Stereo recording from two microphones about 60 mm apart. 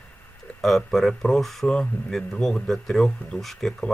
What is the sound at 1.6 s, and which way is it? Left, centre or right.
Speech, centre.